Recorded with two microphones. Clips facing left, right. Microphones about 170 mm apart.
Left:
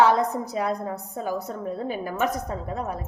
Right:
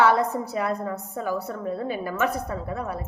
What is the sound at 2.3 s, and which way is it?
Speech, 20° left (ahead or behind).